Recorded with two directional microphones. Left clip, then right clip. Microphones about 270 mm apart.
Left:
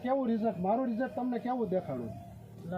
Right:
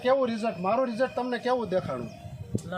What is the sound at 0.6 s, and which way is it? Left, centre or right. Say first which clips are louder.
Speech: right 6 dB; centre.